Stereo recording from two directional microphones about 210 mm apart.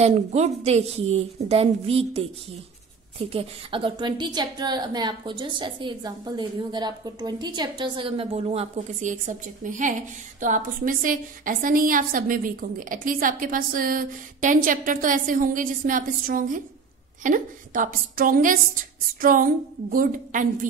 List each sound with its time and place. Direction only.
0.0 s a woman's voice: 30° right (ahead or behind)